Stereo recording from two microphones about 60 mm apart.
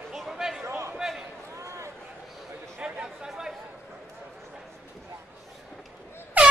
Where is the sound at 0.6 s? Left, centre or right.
Right.